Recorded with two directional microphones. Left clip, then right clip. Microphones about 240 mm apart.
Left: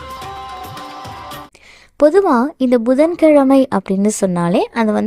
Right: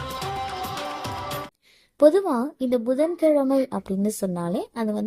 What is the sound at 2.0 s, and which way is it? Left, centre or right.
A woman's voice, left.